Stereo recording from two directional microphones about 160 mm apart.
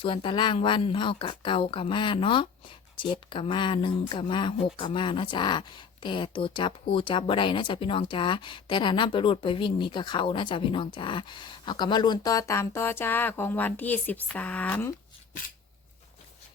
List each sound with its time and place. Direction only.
0.0 s speech: 30° left (ahead or behind); by 14.9 s 10° left (ahead or behind)